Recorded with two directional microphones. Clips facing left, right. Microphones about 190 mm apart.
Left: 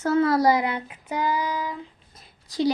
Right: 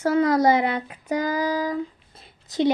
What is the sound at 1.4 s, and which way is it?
Child singing, 90° right.